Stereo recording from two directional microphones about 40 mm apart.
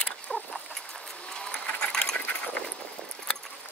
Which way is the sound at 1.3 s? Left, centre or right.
Centre.